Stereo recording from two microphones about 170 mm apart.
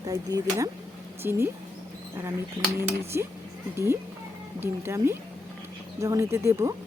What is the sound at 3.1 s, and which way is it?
Speech, 15° right (ahead or behind).